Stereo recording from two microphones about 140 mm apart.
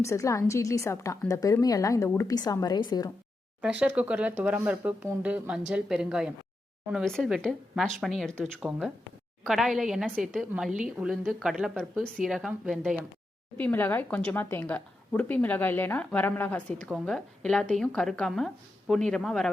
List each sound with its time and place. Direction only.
0.0 s a woman's voice: 20° left (ahead or behind)
3.6 s a woman's voice: 5° right (ahead or behind)
11.8 s a woman's voice: 5° left (ahead or behind)
13.6 s a woman's voice: 10° left (ahead or behind)